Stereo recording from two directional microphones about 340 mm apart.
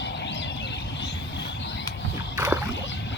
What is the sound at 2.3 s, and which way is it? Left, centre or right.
Rowboat, centre.